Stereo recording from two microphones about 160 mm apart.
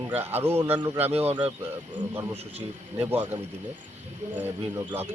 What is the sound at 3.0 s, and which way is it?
Speech, 10° right (ahead or behind).